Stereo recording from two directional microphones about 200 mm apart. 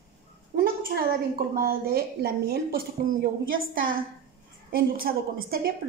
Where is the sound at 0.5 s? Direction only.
45° right (ahead or behind).